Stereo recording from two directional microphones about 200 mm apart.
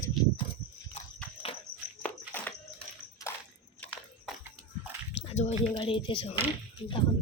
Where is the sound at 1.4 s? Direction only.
30° left (ahead or behind).